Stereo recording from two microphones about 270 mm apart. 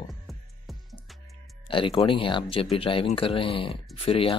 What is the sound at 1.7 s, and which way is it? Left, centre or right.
Speech, centre.